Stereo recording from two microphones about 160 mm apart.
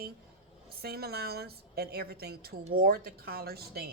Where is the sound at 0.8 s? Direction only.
80° right.